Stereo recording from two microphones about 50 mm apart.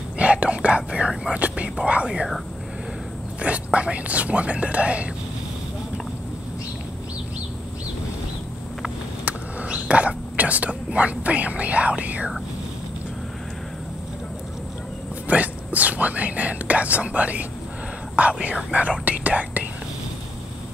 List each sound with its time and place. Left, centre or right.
0.2 s whispering: right
1.8 s speech: right
3.4 s speech: right
9.2 s speech: right
15.2 s speech: right